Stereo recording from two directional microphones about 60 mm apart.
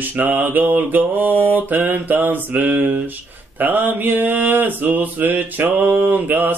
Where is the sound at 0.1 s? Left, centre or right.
Right.